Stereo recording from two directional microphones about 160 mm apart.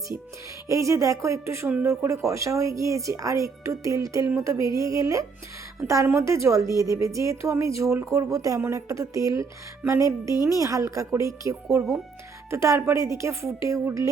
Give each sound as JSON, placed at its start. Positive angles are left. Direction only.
{"t": 0.7, "sound": "a woman's voice", "side_deg": -20}